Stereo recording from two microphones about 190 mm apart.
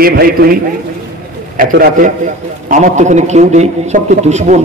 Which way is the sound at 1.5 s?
50° right (ahead or behind).